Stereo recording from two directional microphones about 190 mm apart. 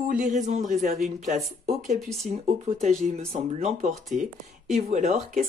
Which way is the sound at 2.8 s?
35° right (ahead or behind).